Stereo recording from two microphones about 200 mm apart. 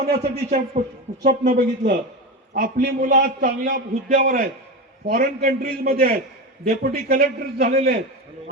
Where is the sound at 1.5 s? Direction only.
55° right (ahead or behind).